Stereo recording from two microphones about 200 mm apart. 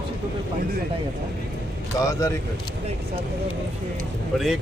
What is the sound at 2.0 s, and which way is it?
Speech, 15° left (ahead or behind).